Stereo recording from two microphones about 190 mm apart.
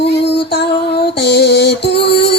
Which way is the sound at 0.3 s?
60° left (ahead or behind).